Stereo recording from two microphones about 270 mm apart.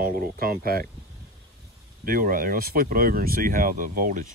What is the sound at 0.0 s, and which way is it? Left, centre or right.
Speech, right.